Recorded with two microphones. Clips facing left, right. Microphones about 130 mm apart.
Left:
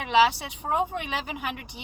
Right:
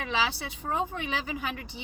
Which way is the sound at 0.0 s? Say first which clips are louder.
Left 9 dB; 20° left (ahead or behind).